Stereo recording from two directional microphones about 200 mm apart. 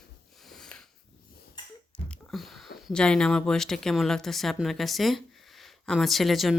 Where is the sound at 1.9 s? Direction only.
5° left (ahead or behind).